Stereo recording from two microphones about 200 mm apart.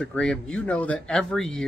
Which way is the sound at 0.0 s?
5° left (ahead or behind).